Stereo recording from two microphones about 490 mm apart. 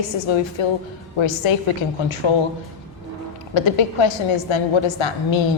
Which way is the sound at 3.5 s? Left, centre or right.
Left.